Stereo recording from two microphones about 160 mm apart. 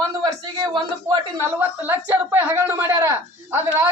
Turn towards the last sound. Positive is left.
turn(degrees=-15)  # may be behind; listen again after turning